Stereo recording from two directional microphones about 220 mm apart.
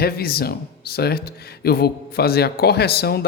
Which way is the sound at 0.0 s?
45° left (ahead or behind).